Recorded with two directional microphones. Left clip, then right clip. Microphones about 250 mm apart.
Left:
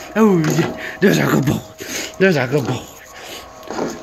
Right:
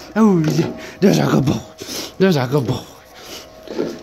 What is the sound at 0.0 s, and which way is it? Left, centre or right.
Speech, centre.